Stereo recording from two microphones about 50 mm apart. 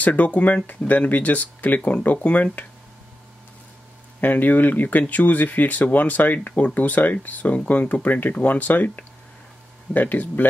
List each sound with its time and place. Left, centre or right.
0.0 s speech: left
4.2 s speech: left